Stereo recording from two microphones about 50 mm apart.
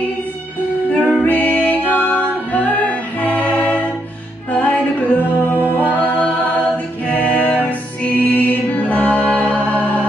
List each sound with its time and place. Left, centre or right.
0.9 s music: left
5.5 s music: left
8.1 s mantra: left